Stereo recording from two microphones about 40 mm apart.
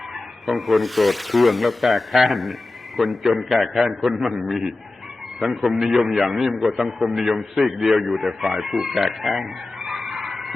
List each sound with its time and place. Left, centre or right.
0.1 s a man's voice: centre